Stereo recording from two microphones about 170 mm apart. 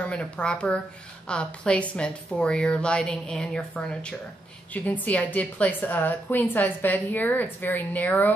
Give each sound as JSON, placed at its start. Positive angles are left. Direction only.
{"t": 0.0, "sound": "a woman's voice", "side_deg": 5}